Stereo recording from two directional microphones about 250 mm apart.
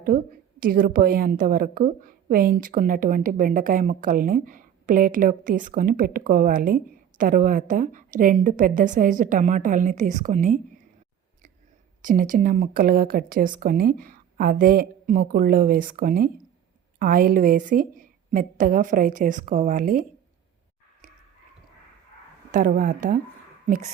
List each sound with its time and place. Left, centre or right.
0.6 s a woman's voice: right
12.0 s a woman's voice: right
22.5 s a woman's voice: right